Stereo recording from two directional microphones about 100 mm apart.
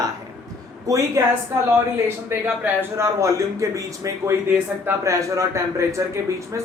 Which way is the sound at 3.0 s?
30° right (ahead or behind).